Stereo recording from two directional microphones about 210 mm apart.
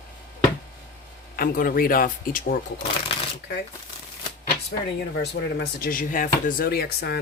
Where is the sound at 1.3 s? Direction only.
45° left (ahead or behind).